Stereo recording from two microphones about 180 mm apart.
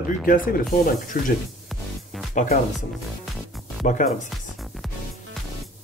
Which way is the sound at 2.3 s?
45° left (ahead or behind).